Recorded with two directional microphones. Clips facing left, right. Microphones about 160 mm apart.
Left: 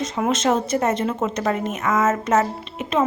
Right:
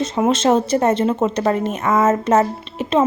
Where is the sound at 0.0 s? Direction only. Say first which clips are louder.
Right 4 dB; 30° right (ahead or behind).